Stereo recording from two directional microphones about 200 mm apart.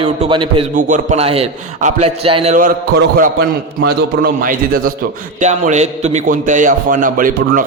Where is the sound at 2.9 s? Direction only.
55° right (ahead or behind).